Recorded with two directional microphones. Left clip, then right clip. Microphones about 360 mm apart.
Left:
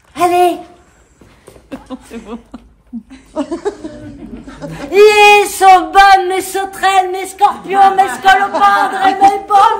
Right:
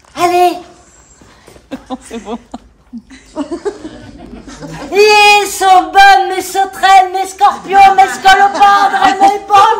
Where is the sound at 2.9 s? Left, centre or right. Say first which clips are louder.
Left 2 dB; left.